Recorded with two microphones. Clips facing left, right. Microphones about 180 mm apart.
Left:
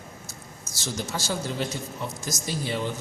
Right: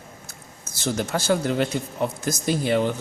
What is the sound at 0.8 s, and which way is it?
Speech, 60° right (ahead or behind).